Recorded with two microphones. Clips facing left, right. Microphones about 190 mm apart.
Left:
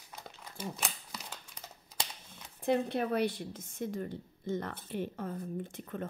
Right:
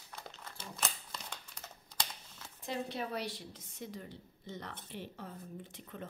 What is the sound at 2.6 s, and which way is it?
Speech, 55° left (ahead or behind).